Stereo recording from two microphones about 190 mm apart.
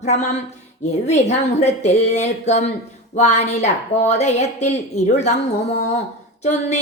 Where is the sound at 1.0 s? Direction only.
35° left (ahead or behind).